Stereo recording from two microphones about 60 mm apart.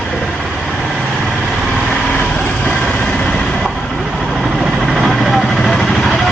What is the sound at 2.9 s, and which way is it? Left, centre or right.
Vehicle, centre.